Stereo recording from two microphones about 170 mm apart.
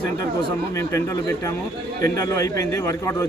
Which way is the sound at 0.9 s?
20° left (ahead or behind).